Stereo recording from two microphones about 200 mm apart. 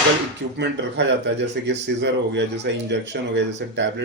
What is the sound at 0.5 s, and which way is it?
Speech, 60° right (ahead or behind).